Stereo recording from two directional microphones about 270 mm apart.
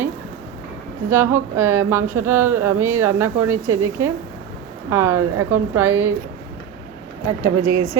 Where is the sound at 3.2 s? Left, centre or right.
Right.